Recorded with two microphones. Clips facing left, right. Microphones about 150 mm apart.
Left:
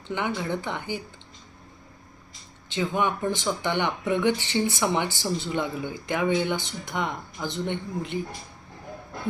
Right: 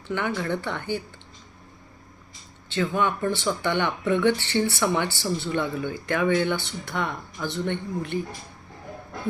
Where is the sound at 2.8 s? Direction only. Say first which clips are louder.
Right 1 dB; 15° left (ahead or behind).